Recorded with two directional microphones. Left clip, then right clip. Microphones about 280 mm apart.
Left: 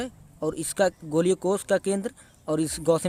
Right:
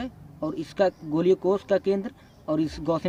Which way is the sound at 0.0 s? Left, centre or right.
Left.